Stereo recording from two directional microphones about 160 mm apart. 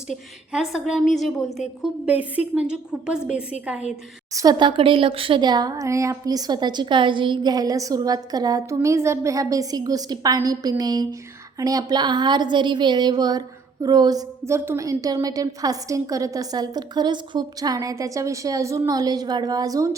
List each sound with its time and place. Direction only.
0.5 s a woman's voice: 5° right (ahead or behind)
4.3 s speech: 20° right (ahead or behind)